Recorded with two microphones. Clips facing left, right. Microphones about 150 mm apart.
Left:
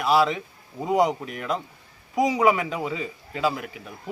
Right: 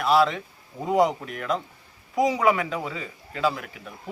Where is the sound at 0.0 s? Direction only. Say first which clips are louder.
Even; centre (ahead or behind).